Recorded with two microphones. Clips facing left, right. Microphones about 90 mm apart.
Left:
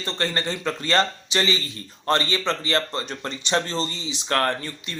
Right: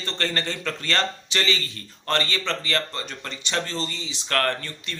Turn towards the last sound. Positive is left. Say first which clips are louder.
# left 2 dB
turn(degrees=15)  # may be behind; listen again after turning